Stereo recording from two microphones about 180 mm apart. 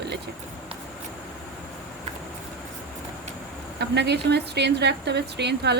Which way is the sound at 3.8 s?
70° right (ahead or behind).